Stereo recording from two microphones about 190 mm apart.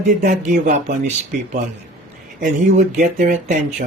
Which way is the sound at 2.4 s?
40° right (ahead or behind).